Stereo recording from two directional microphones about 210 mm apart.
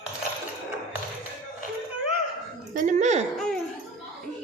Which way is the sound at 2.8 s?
35° right (ahead or behind).